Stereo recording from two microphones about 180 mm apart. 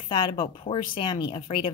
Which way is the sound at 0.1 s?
25° left (ahead or behind).